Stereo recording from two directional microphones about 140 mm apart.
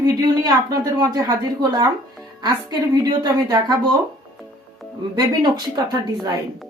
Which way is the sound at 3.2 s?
30° right (ahead or behind).